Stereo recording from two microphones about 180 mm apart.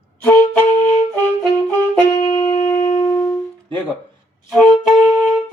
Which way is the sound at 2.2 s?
20° left (ahead or behind).